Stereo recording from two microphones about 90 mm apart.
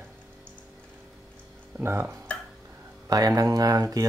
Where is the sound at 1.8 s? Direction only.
30° right (ahead or behind).